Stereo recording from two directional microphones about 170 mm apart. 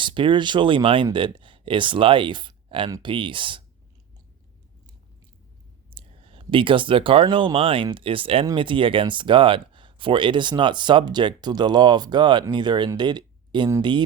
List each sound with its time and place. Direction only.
0.0 s speech: 30° right (ahead or behind)
5.9 s speech: 30° right (ahead or behind)